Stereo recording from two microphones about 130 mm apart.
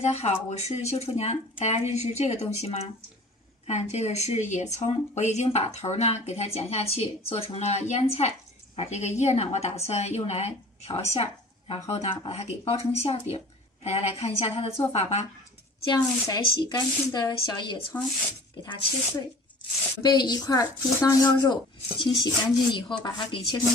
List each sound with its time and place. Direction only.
0.0 s speech: 55° left (ahead or behind)
11.1 s a sound: 45° left (ahead or behind)
11.9 s speech: 50° left (ahead or behind)
15.9 s a woman's voice: 30° left (ahead or behind)
20.0 s a woman's voice: 35° left (ahead or behind)